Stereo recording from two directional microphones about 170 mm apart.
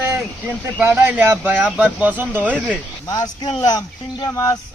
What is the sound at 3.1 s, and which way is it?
Speech, 25° left (ahead or behind).